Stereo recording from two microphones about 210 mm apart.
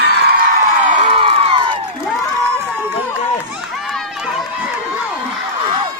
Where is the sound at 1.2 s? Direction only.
25° right (ahead or behind).